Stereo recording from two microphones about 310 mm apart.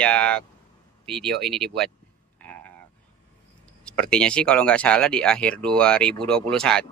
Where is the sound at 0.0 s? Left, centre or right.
Centre.